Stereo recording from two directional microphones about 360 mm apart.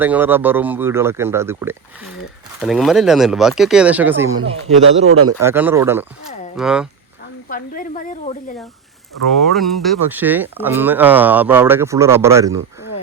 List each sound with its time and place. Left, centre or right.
0.0 s speech: centre
5.0 s a man's voice: right
5.4 s a man's voice: centre
7.5 s speech: left
9.4 s speech: centre